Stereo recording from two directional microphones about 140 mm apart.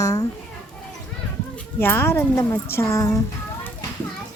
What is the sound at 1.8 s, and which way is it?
A woman's voice, 15° left (ahead or behind).